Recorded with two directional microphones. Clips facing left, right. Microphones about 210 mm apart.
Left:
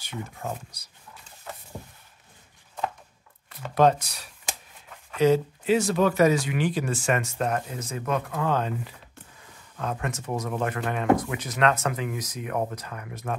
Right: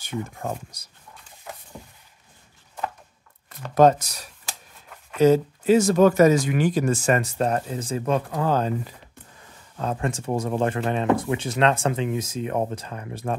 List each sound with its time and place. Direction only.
0.0 s speech: 50° right (ahead or behind)
3.4 s speech: 45° right (ahead or behind)